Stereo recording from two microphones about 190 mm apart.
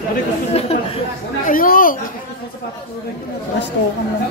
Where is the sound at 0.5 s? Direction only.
30° left (ahead or behind).